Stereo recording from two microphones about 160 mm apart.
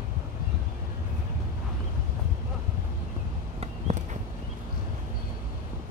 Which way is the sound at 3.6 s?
40° right (ahead or behind).